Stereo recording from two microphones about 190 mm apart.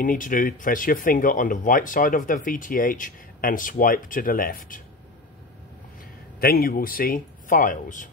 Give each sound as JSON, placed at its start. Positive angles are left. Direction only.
{"t": 0.0, "sound": "speech", "side_deg": 45}
{"t": 6.4, "sound": "speech", "side_deg": 50}